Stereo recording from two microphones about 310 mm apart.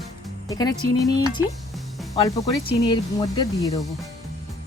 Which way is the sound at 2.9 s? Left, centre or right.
Centre.